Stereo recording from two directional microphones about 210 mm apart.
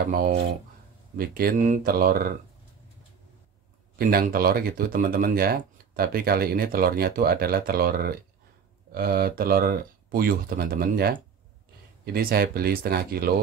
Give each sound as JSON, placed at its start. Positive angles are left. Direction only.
{"t": 1.1, "sound": "speech", "side_deg": -45}
{"t": 4.0, "sound": "speech", "side_deg": -45}